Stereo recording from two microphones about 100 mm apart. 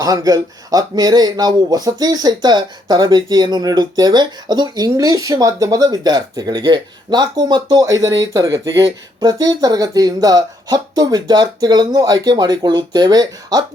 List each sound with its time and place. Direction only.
0.0 s speech: 35° right (ahead or behind)